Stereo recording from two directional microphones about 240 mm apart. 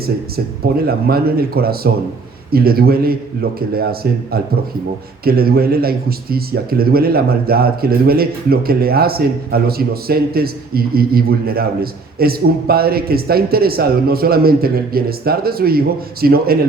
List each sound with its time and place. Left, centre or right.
0.0 s speech: right